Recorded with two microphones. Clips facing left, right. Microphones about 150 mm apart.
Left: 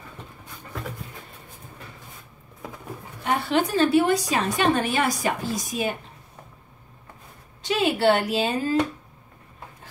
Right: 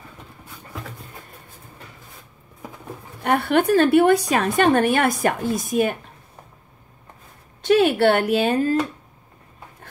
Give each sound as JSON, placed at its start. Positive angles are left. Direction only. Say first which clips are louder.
{"t": 3.3, "sound": "a woman's voice", "louder": "right 5 dB", "side_deg": -55}
{"t": 7.6, "sound": "a woman's voice", "louder": "right 5 dB", "side_deg": -55}